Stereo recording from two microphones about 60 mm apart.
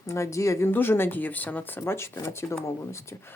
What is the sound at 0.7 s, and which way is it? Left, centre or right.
Speech, left.